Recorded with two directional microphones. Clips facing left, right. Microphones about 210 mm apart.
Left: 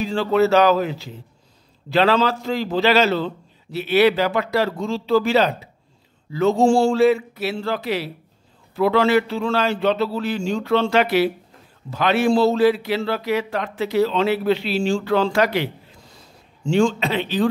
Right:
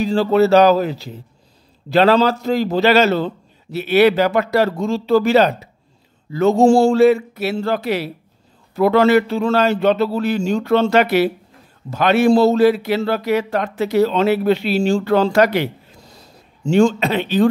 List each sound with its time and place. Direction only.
0.0 s a man's voice: 35° right (ahead or behind)